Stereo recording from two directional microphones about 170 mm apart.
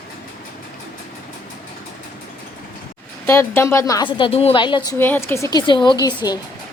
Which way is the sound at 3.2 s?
15° left (ahead or behind).